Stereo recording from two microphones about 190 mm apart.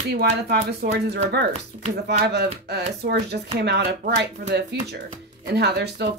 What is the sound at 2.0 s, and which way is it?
Speech, 60° right (ahead or behind).